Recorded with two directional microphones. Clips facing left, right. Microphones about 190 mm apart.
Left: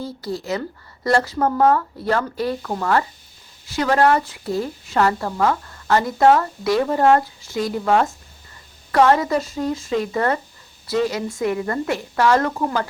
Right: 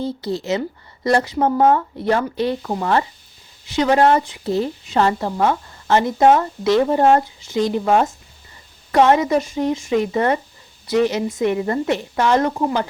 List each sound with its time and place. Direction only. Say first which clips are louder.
0.0 s a woman's voice: right 4 dB; 25° right (ahead or behind)